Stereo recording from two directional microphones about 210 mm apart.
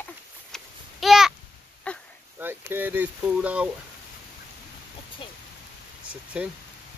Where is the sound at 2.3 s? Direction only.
10° right (ahead or behind).